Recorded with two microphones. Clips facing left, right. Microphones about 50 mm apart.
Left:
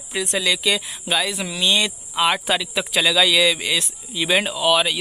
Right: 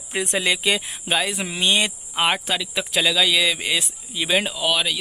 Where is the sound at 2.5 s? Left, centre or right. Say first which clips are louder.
Left 3 dB; centre.